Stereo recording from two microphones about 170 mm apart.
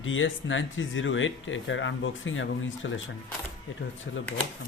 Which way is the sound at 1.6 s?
90° left.